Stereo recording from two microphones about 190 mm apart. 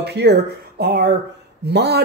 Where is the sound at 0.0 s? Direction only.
60° right (ahead or behind).